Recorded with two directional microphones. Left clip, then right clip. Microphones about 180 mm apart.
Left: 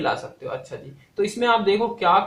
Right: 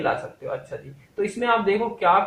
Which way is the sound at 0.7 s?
35° left (ahead or behind).